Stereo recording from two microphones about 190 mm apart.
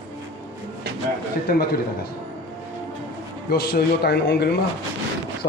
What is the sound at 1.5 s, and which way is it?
Speech, 50° left (ahead or behind).